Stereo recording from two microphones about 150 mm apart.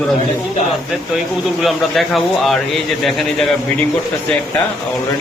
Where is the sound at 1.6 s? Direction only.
Centre (ahead or behind).